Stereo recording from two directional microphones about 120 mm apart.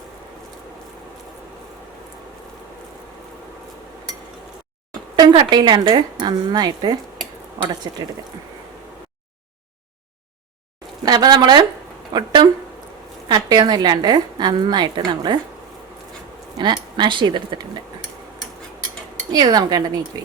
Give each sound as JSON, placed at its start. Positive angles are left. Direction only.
{"t": 5.3, "sound": "a woman's voice", "side_deg": -40}
{"t": 11.0, "sound": "a woman's voice", "side_deg": -35}
{"t": 16.6, "sound": "a woman's voice", "side_deg": -40}
{"t": 19.3, "sound": "a woman's voice", "side_deg": -35}